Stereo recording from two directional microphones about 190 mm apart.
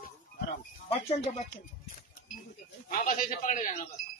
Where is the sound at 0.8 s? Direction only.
35° left (ahead or behind).